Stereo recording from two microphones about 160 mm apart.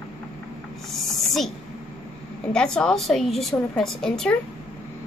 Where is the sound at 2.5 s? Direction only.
5° left (ahead or behind).